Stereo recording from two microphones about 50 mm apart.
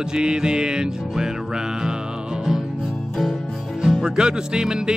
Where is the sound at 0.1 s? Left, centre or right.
Centre.